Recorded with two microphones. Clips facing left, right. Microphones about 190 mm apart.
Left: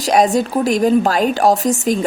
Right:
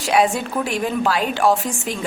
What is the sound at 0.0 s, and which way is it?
A woman's voice, 40° left (ahead or behind).